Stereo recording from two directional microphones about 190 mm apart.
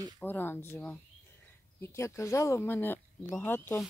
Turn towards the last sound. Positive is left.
turn(degrees=10)  # may be behind; listen again after turning